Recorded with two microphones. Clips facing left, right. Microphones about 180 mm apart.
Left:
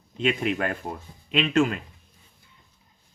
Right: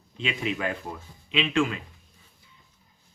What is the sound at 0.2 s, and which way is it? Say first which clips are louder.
A man's voice: left 5 dB; 50° left (ahead or behind).